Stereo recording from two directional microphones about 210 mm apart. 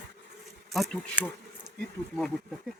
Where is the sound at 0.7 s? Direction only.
Centre (ahead or behind).